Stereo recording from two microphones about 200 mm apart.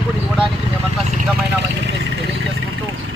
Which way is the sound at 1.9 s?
65° right (ahead or behind).